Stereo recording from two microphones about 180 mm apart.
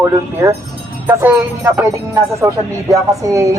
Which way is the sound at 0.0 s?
15° right (ahead or behind).